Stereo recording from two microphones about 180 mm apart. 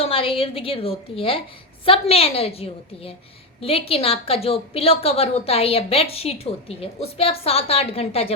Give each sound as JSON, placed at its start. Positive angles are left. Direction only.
{"t": 0.0, "sound": "a woman's voice", "side_deg": 30}